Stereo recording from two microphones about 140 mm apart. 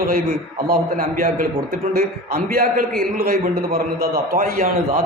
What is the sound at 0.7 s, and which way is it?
Speech, 80° right.